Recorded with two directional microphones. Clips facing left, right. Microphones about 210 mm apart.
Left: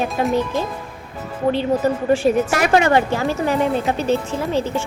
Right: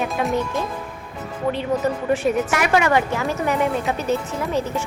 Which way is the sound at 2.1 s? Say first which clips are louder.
Left 4 dB; 30° left (ahead or behind).